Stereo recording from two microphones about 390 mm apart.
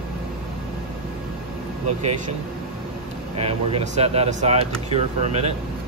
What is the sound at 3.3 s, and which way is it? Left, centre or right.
Speech, centre.